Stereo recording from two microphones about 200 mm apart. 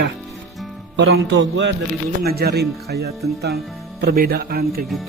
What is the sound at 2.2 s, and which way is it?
Speech, 50° right (ahead or behind).